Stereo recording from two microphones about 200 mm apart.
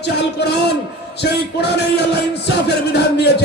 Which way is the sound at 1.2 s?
55° left (ahead or behind).